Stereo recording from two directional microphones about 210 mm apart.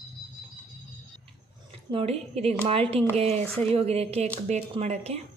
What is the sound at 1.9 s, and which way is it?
Speech, 30° right (ahead or behind).